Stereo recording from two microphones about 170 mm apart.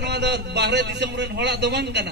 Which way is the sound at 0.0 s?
80° right.